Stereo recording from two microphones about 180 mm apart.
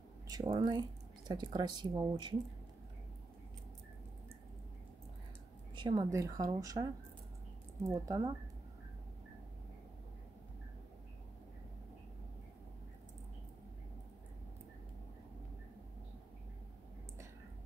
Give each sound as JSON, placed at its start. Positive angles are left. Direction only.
{"t": 0.3, "sound": "speech", "side_deg": -25}
{"t": 5.8, "sound": "a sound", "side_deg": -25}
{"t": 6.1, "sound": "speech", "side_deg": -20}